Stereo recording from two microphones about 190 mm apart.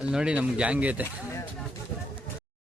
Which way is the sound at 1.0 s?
15° left (ahead or behind).